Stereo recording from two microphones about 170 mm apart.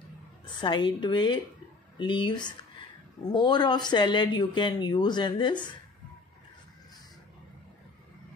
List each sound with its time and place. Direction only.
0.6 s speech: 25° left (ahead or behind)